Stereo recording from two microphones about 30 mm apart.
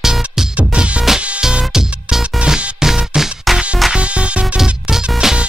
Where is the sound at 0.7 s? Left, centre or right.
Right.